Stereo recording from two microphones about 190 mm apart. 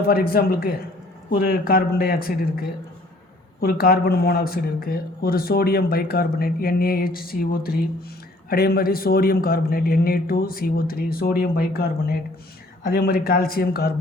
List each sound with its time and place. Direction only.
0.0 s speech: 50° left (ahead or behind)